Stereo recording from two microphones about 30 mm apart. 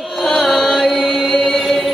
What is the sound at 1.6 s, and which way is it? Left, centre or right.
Music, centre.